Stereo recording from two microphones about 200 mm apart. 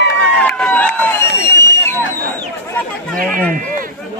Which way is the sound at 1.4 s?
55° left (ahead or behind).